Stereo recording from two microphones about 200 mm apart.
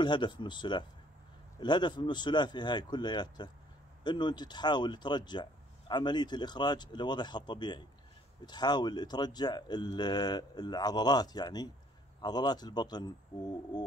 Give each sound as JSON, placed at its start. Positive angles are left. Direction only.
{"t": 0.0, "sound": "speech", "side_deg": 25}